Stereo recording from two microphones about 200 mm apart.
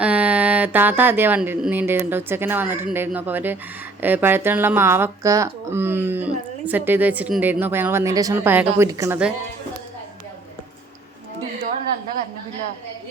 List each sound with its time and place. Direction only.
0.0 s speech: 5° right (ahead or behind)